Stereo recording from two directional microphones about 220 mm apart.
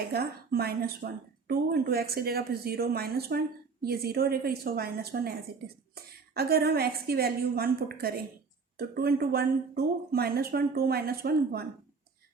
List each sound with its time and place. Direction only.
0.1 s speech: 45° right (ahead or behind)